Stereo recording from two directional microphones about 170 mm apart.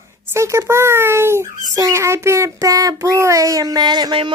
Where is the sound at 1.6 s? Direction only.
20° right (ahead or behind).